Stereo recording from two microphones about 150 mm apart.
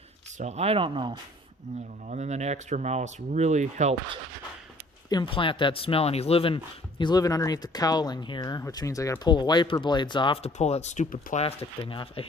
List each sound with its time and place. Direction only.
0.3 s speech: 45° right (ahead or behind)
1.7 s speech: 50° right (ahead or behind)
5.0 s speech: 30° left (ahead or behind)
7.0 s speech: 25° left (ahead or behind); by 11.4 s 55° left (ahead or behind)
11.6 s speech: 30° left (ahead or behind)